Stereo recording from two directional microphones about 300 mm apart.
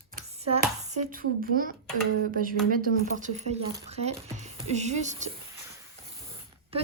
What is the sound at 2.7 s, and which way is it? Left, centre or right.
Music, right.